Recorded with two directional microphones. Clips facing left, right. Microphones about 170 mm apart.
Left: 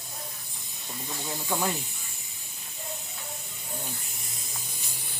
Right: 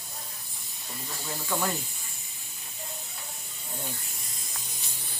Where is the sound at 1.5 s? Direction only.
15° left (ahead or behind).